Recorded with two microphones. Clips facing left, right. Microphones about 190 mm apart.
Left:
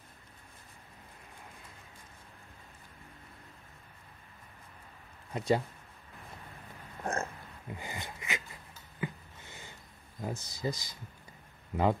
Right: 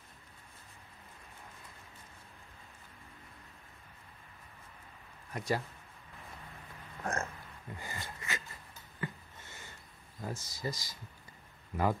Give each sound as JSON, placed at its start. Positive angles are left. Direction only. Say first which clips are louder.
{"t": 5.3, "sound": "speech", "louder": "left 5 dB", "side_deg": 25}
{"t": 7.0, "sound": "a sound", "louder": "left 2 dB", "side_deg": 20}
{"t": 10.2, "sound": "speech", "louder": "left 3 dB", "side_deg": 20}